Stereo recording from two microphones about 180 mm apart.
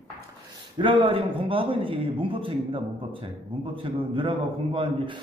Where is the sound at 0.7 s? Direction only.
30° right (ahead or behind).